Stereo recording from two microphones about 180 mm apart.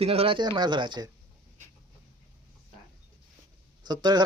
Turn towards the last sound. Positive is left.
turn(degrees=-25)  # may be behind; listen again after turning